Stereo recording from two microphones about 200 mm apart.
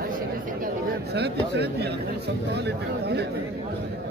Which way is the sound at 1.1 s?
55° right (ahead or behind).